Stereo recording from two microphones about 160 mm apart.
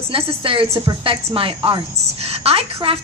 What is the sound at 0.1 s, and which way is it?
A woman's voice, 35° right (ahead or behind).